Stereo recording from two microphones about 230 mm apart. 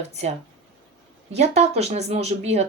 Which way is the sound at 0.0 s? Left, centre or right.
Right.